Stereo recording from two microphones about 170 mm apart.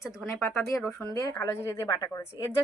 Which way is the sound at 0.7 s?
20° left (ahead or behind).